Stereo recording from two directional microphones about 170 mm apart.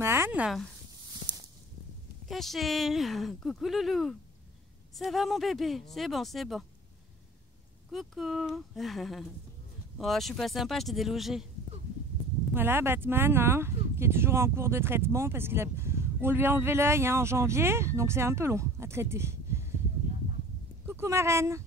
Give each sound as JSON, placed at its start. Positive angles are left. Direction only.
{"t": 0.0, "sound": "speech", "side_deg": -15}
{"t": 2.2, "sound": "speech", "side_deg": 0}
{"t": 7.9, "sound": "speech", "side_deg": 0}
{"t": 12.5, "sound": "speech", "side_deg": -15}
{"t": 20.8, "sound": "speech", "side_deg": -15}